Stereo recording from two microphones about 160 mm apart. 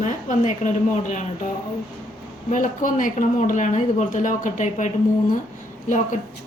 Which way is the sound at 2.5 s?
55° left (ahead or behind).